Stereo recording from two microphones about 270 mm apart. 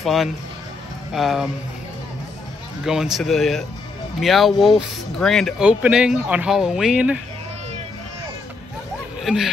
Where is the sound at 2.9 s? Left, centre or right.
Centre.